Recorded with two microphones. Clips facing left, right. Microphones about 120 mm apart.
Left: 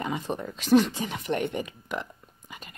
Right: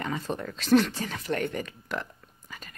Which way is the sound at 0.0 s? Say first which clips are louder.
Left 1 dB; 15° left (ahead or behind).